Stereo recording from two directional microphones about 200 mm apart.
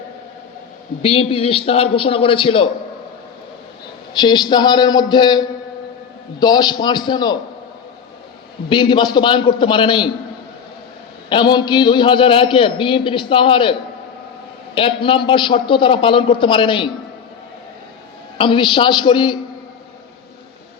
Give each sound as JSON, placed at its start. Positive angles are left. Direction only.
{"t": 1.0, "sound": "a man's voice", "side_deg": 30}
{"t": 4.2, "sound": "a man's voice", "side_deg": 20}
{"t": 8.7, "sound": "a man's voice", "side_deg": 25}
{"t": 11.3, "sound": "a man's voice", "side_deg": 25}
{"t": 14.8, "sound": "a man's voice", "side_deg": 25}
{"t": 18.3, "sound": "a man's voice", "side_deg": 25}